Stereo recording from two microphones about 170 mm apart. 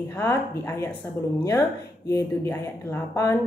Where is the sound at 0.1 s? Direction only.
15° left (ahead or behind).